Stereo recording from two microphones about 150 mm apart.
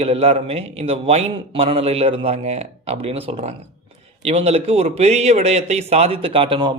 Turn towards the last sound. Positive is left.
turn(degrees=-35)  # may be behind; listen again after turning